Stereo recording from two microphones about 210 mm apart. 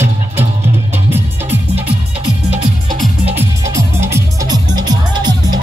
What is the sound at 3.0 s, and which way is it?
Music, 10° right (ahead or behind).